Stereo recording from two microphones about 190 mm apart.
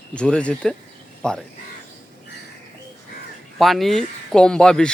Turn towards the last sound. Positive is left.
turn(degrees=5)  # may be behind; listen again after turning